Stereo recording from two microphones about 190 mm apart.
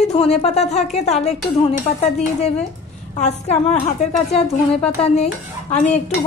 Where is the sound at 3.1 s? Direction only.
35° left (ahead or behind).